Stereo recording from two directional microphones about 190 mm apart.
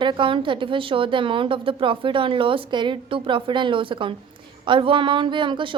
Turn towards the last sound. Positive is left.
turn(degrees=-25)  # may be behind; listen again after turning